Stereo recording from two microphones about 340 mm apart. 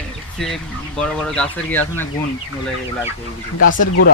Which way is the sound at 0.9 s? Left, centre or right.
Centre.